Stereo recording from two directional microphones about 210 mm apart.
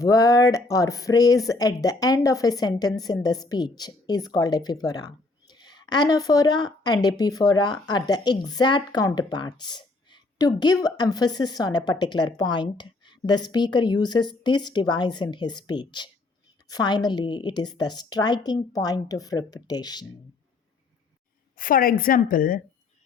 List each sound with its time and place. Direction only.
0.0 s speech: 15° left (ahead or behind)
21.6 s a woman's voice: 40° left (ahead or behind)